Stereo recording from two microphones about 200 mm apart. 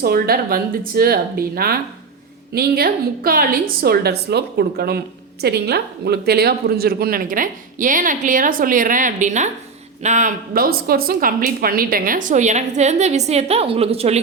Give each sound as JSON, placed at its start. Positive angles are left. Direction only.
{"t": 0.0, "sound": "a woman's voice", "side_deg": -50}